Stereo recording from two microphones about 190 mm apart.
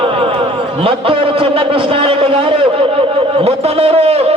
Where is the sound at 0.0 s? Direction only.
30° right (ahead or behind).